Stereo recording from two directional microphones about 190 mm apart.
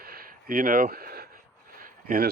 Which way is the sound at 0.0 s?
50° right (ahead or behind).